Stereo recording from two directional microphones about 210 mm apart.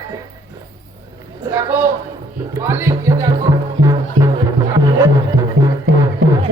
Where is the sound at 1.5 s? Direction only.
15° right (ahead or behind).